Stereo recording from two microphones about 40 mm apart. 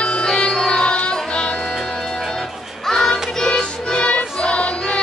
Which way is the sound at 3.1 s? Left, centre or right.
Centre.